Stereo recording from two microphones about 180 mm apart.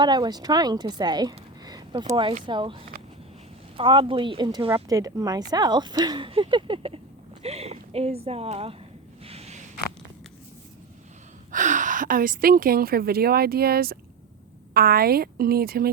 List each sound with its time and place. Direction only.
0.0 s a woman's voice: 25° right (ahead or behind)
9.2 s a sound: 35° right (ahead or behind)
11.5 s a woman's voice: 45° right (ahead or behind)